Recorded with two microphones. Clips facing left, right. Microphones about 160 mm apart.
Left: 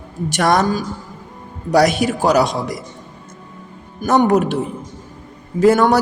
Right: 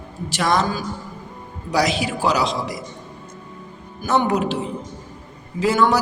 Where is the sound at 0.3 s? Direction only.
50° left (ahead or behind).